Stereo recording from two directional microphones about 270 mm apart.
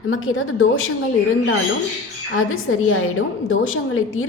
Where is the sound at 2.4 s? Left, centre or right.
Left.